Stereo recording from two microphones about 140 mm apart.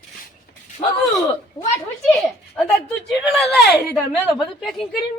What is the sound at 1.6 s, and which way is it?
Speech, 25° left (ahead or behind).